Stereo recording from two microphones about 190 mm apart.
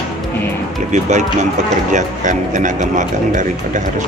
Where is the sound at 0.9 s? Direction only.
40° right (ahead or behind).